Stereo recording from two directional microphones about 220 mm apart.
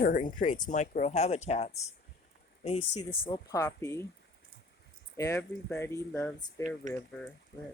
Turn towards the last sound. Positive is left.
turn(degrees=5)  # may be behind; listen again after turning